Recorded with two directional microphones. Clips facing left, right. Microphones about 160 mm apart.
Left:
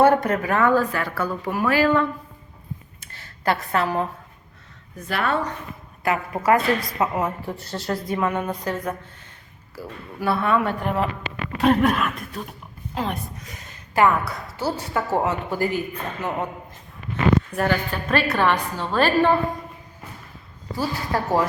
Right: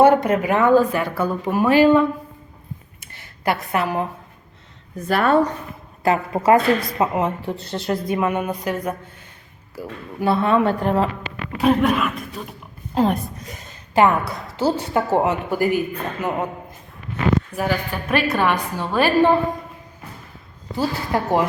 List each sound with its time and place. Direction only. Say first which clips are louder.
0.0 s speech: right 3 dB; 20° right (ahead or behind)
3.0 s a sound: right 2 dB; 15° right (ahead or behind)
5.0 s a woman's voice: right 7 dB; 45° right (ahead or behind)
6.0 s a woman's voice: right 4 dB; 25° right (ahead or behind)
11.5 s speech: right 1 dB; centre (ahead or behind)
12.9 s a woman's voice: right 8 dB; 40° right (ahead or behind)
13.9 s a woman's voice: right 2 dB; 20° right (ahead or behind)
17.5 s a woman's voice: even; 5° right (ahead or behind)
20.7 s speech: right 3 dB; 20° right (ahead or behind)